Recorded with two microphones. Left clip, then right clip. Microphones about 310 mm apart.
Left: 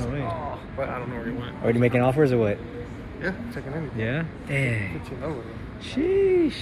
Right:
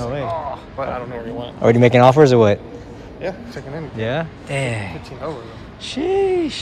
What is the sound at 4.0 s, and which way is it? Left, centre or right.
Speech, centre.